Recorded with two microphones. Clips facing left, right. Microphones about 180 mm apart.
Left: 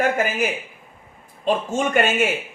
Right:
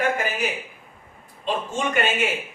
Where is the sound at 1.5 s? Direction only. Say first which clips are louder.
Left 4 dB; 45° left (ahead or behind).